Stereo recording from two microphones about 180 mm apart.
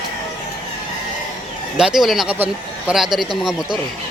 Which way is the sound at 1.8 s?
5° right (ahead or behind).